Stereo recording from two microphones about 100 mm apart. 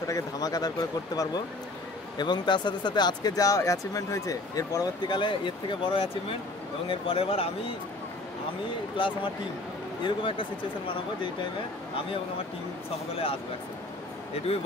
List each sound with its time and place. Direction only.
0.1 s speech: 40° left (ahead or behind); by 7.7 s 70° left (ahead or behind)
8.9 s speech: 55° left (ahead or behind)
12.9 s speech: 70° left (ahead or behind)